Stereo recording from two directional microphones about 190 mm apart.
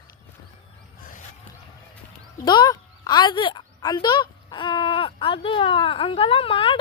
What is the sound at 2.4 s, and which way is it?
Speech, 20° left (ahead or behind).